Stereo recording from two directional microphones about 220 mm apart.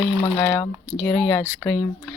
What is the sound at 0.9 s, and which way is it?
Speech, centre (ahead or behind).